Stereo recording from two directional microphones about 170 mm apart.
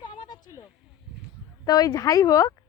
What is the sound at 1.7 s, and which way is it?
Speech, 20° left (ahead or behind).